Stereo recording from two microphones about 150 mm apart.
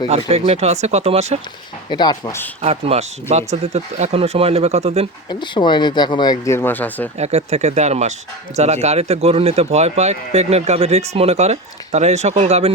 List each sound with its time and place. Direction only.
0.1 s speech: 45° right (ahead or behind)
1.9 s speech: 30° left (ahead or behind)
2.6 s speech: 45° right (ahead or behind)
5.3 s speech: 30° left (ahead or behind)
6.4 s speech: 15° left (ahead or behind)
7.2 s speech: 45° right (ahead or behind)